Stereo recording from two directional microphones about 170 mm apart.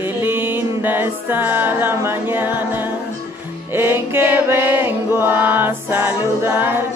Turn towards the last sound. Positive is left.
turn(degrees=-15)  # may be behind; listen again after turning